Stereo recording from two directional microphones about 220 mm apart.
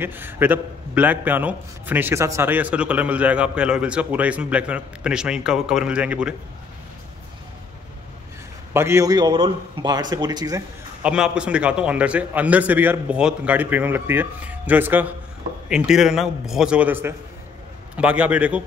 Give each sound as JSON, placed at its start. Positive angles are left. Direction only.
{"t": 0.0, "sound": "a man's voice", "side_deg": -10}
{"t": 8.7, "sound": "a man's voice", "side_deg": -10}
{"t": 11.0, "sound": "a man's voice", "side_deg": -5}